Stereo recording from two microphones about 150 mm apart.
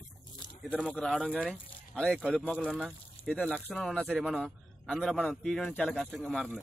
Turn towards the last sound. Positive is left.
turn(degrees=0)  # may be behind; listen again after turning